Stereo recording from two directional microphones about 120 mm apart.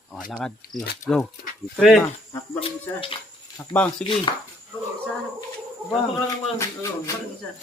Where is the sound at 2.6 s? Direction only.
50° left (ahead or behind).